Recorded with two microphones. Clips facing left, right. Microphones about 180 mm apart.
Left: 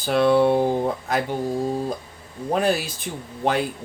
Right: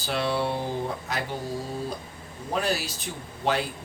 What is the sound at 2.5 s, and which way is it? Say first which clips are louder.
Speech: left 6 dB; 50° left (ahead or behind).